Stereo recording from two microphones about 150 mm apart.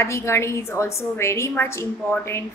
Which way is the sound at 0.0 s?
20° left (ahead or behind).